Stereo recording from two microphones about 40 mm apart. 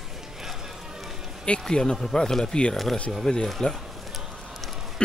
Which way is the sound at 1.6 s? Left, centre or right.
Centre.